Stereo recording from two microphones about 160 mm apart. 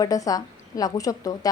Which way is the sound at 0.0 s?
20° left (ahead or behind).